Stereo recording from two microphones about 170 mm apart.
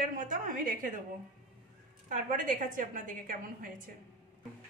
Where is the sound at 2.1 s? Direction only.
50° right (ahead or behind).